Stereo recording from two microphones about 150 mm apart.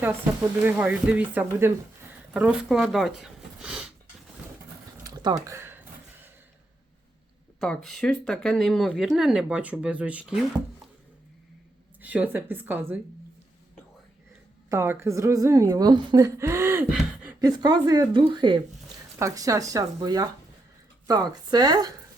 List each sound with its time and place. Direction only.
0.6 s speech: 10° right (ahead or behind)
5.0 s a sound: 25° right (ahead or behind)
7.6 s speech: 5° left (ahead or behind)
12.0 s speech: 10° right (ahead or behind)
14.7 s a woman's voice: 15° right (ahead or behind)